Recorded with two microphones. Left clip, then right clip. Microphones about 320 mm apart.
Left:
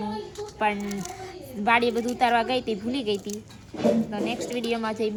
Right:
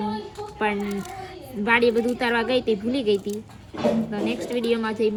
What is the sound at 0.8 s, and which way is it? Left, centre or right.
Speech, centre.